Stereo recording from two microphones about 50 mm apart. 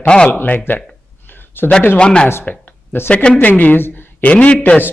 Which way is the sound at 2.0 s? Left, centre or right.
Centre.